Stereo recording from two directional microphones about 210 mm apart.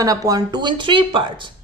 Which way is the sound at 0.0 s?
15° right (ahead or behind).